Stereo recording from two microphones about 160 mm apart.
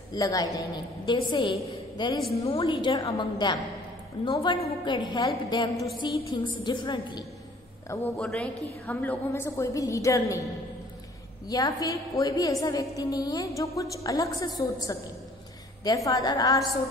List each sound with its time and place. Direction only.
0.1 s a woman's voice: 25° left (ahead or behind)
8.2 s a woman's voice: 5° left (ahead or behind)
11.4 s a woman's voice: 20° left (ahead or behind)